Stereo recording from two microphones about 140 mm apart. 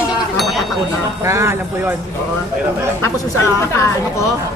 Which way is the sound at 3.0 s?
20° left (ahead or behind).